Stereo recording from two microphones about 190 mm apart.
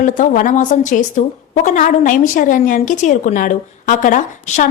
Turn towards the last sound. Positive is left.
turn(degrees=40)  # may be behind; listen again after turning